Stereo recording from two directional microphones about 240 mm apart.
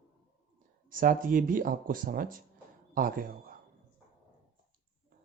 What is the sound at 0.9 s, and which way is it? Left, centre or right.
Speech, right.